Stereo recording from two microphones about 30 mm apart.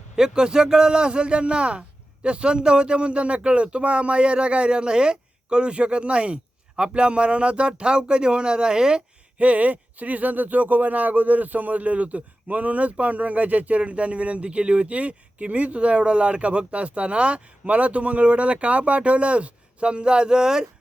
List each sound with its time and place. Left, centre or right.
0.2 s a man's voice: right
9.4 s speech: right